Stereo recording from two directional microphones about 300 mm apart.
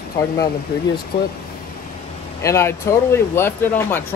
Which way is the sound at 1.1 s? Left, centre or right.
Left.